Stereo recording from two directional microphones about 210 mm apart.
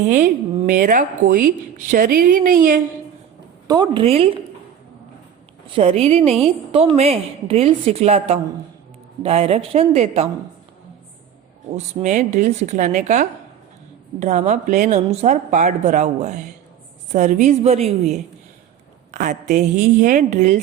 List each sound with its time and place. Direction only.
0.1 s a woman's voice: 40° right (ahead or behind)
3.7 s a woman's voice: 20° right (ahead or behind)
5.7 s a woman's voice: 30° right (ahead or behind)
12.0 s a woman's voice: 35° right (ahead or behind)
19.1 s a woman's voice: 35° right (ahead or behind)